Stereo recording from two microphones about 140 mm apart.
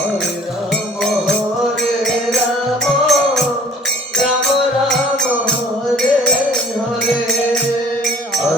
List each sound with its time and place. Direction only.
2.8 s music: centre (ahead or behind)